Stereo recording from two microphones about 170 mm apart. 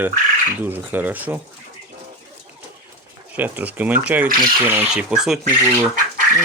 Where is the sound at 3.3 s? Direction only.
10° right (ahead or behind).